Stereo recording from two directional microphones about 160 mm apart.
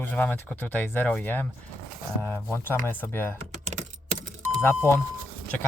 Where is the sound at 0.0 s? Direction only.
10° left (ahead or behind).